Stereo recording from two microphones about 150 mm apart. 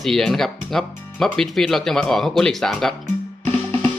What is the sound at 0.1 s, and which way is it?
Speech, centre (ahead or behind).